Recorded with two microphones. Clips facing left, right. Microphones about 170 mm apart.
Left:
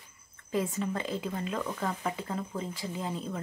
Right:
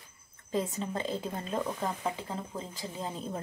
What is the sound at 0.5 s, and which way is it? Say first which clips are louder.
Speech: left 1 dB; 25° right (ahead or behind).